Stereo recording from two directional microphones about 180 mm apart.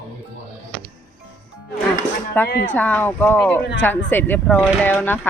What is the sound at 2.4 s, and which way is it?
Speech, 10° left (ahead or behind).